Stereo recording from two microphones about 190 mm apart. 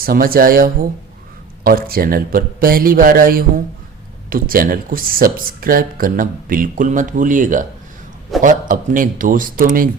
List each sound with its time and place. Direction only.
0.0 s speech: 50° right (ahead or behind)